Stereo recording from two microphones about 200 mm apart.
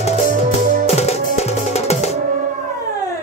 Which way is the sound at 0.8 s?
35° left (ahead or behind).